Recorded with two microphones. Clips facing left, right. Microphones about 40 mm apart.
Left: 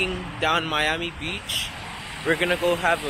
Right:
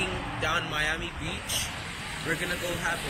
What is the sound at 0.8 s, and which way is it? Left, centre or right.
Speech, left.